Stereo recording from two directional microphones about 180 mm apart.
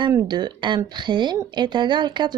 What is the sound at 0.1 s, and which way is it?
A woman's voice, 20° right (ahead or behind).